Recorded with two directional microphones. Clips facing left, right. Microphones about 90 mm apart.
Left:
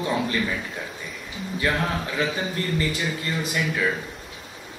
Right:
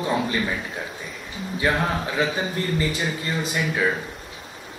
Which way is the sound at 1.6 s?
20° right (ahead or behind).